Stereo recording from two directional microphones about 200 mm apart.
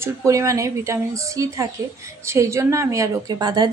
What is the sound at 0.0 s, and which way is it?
Speech, 15° right (ahead or behind).